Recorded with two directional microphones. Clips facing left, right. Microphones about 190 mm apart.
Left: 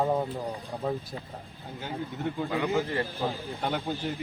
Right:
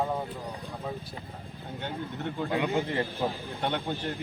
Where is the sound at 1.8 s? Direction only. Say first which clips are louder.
Left 1 dB; centre (ahead or behind).